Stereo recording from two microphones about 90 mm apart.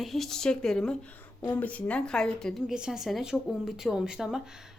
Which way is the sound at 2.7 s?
5° right (ahead or behind).